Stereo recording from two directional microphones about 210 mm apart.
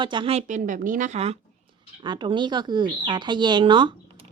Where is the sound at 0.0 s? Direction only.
25° right (ahead or behind).